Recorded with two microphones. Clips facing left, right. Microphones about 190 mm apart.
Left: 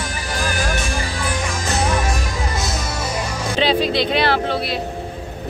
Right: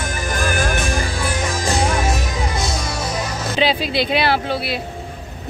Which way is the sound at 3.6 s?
5° right (ahead or behind).